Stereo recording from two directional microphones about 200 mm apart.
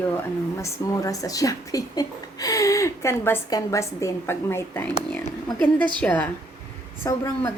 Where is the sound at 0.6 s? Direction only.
15° left (ahead or behind).